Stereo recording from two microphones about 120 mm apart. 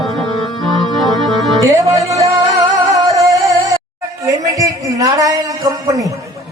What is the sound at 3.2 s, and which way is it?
Music, 25° right (ahead or behind).